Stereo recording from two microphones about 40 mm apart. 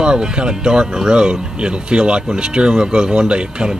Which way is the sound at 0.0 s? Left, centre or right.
Right.